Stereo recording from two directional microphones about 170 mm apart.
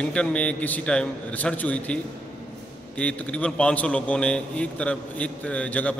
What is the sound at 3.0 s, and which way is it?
A man's voice, 5° left (ahead or behind).